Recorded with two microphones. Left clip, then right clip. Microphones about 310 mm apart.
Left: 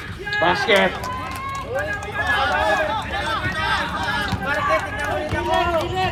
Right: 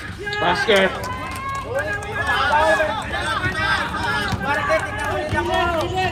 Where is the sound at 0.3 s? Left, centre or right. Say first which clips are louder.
Even; left.